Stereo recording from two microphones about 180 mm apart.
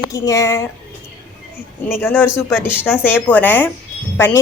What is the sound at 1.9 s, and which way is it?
A woman's voice, 10° left (ahead or behind).